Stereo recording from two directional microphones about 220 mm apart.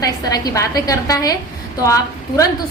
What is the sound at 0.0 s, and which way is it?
A woman's voice, 15° left (ahead or behind).